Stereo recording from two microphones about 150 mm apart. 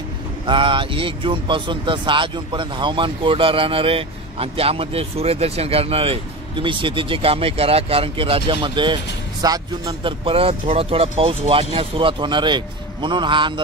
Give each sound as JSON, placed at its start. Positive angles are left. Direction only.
{"t": 0.5, "sound": "speech", "side_deg": -35}
{"t": 10.2, "sound": "speech", "side_deg": -40}